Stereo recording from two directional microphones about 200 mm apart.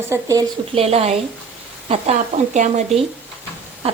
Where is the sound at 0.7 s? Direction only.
30° right (ahead or behind).